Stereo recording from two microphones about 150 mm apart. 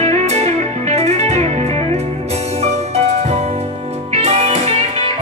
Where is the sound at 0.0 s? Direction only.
45° right (ahead or behind).